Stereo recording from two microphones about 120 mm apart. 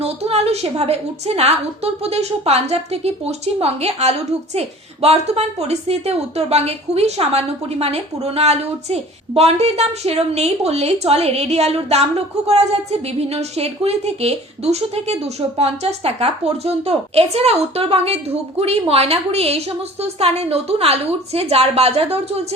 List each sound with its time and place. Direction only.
0.0 s a woman's voice: 60° right (ahead or behind)